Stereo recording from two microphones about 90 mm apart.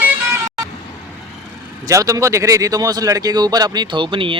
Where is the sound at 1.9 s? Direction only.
40° right (ahead or behind).